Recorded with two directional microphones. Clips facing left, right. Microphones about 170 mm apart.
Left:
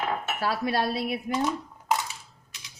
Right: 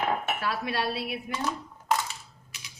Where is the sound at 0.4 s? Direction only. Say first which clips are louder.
Left 7 dB; 40° left (ahead or behind).